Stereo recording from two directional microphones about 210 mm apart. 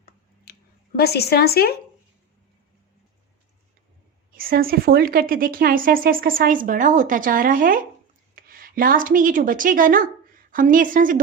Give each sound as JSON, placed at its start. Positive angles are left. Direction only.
{"t": 0.5, "sound": "a sound", "side_deg": 50}
{"t": 0.9, "sound": "a woman's voice", "side_deg": 50}
{"t": 4.3, "sound": "a woman's voice", "side_deg": -45}